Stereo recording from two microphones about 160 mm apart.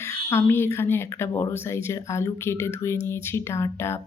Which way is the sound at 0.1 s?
15° left (ahead or behind).